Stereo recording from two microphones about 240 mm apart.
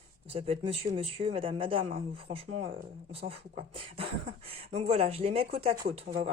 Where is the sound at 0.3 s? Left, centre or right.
Right.